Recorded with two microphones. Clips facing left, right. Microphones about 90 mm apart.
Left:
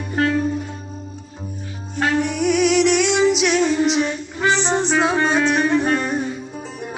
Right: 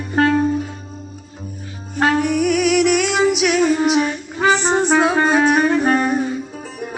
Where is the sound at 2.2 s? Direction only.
5° right (ahead or behind).